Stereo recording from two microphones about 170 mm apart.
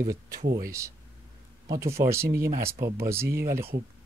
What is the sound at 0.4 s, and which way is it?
Speech, 60° right (ahead or behind).